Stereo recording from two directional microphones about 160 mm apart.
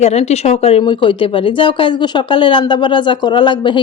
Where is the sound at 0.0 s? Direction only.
40° left (ahead or behind).